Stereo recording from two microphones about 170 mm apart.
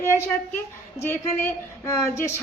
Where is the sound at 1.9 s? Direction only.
15° left (ahead or behind).